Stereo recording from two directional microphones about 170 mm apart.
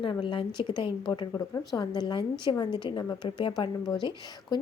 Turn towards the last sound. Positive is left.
turn(degrees=25)  # may be behind; listen again after turning